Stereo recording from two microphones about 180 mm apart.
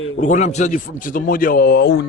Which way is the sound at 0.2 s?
40° left (ahead or behind).